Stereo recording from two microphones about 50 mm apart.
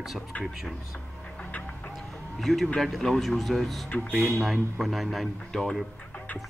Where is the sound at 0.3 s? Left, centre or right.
Left.